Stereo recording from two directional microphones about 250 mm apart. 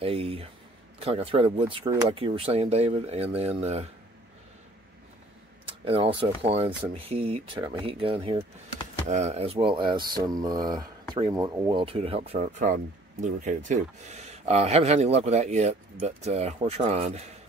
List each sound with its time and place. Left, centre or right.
0.0 s speech: right
5.7 s speech: right